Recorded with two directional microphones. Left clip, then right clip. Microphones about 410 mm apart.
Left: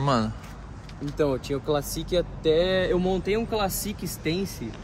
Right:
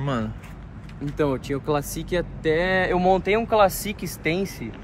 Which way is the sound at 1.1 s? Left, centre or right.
Right.